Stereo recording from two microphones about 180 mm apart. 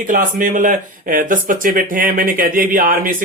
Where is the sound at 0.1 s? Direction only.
50° right (ahead or behind).